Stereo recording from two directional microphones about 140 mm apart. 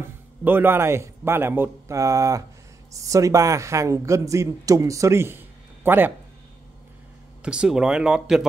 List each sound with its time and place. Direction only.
0.4 s speech: 15° right (ahead or behind)
7.4 s speech: 5° right (ahead or behind)